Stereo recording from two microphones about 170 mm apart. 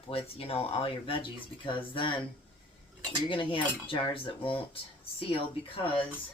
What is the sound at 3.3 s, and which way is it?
Speech, 30° left (ahead or behind).